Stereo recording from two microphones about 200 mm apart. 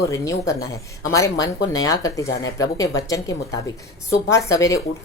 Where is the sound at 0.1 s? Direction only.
15° left (ahead or behind).